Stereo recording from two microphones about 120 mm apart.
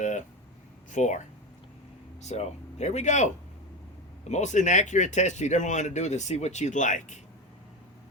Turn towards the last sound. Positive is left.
turn(degrees=90)